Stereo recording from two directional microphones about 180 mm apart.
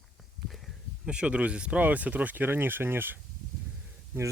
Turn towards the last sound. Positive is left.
turn(degrees=-10)  # may be behind; listen again after turning